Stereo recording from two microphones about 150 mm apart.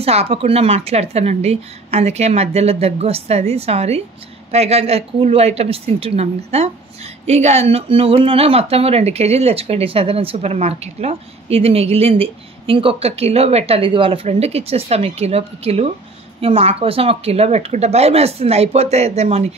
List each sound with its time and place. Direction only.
0.0 s speech: 40° right (ahead or behind)